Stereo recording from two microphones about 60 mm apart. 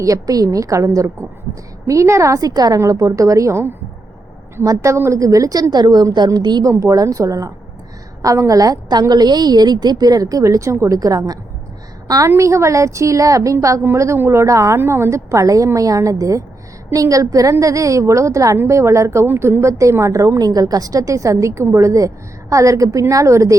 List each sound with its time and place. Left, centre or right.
0.0 s a woman's voice: right
1.9 s a woman's voice: right
3.5 s speech: right
4.6 s a woman's voice: right
4.9 s a woman's voice: right
12.4 s a woman's voice: right
13.8 s a woman's voice: right
14.8 s a woman's voice: right
15.3 s a woman's voice: right
18.7 s a woman's voice: right
19.3 s a woman's voice: right
20.4 s a woman's voice: right